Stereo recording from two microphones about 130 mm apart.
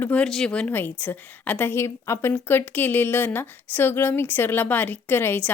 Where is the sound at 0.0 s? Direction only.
10° left (ahead or behind).